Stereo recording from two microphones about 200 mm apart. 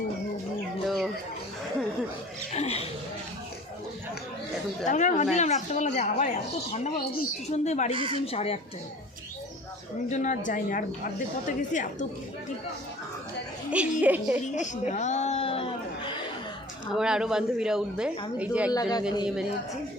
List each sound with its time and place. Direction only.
0.9 s music: centre (ahead or behind)
2.5 s a sound: 30° left (ahead or behind)
4.9 s speech: 40° left (ahead or behind)
7.9 s speech: 25° right (ahead or behind)
8.2 s a man's voice: 30° left (ahead or behind)
10.1 s speech: 40° left (ahead or behind)
13.7 s a woman's voice: 5° right (ahead or behind)
14.5 s chatter: 35° left (ahead or behind)
16.9 s speech: 5° right (ahead or behind)
18.7 s a man's voice: 20° left (ahead or behind)